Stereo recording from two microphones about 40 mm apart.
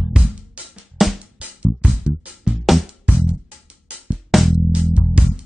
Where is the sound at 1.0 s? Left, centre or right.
Centre.